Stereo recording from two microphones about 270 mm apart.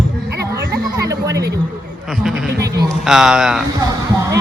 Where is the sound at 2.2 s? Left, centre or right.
Centre.